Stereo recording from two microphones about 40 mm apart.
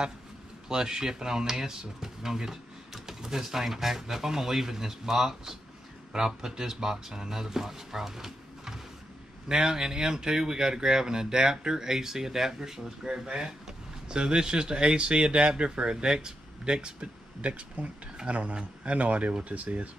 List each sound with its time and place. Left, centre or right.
0.7 s speech: centre; by 19.9 s right